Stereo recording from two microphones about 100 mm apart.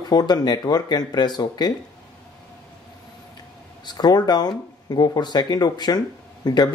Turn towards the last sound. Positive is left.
turn(degrees=40)  # may be behind; listen again after turning